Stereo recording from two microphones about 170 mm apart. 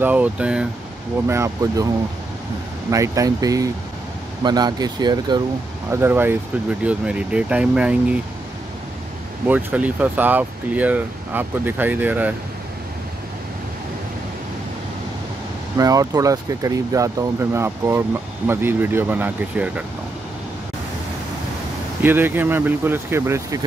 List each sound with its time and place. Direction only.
0.0 s speech: 10° right (ahead or behind)
2.9 s speech: 20° right (ahead or behind)
5.9 s speech: 15° right (ahead or behind)
9.5 s speech: 10° right (ahead or behind)
15.8 s speech: 20° right (ahead or behind)
22.0 s speech: 10° right (ahead or behind)